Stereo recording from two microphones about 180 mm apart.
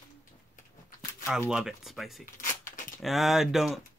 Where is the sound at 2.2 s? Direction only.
50° left (ahead or behind).